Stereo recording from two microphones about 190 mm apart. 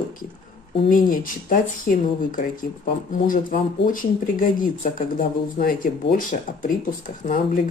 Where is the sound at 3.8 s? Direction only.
45° left (ahead or behind).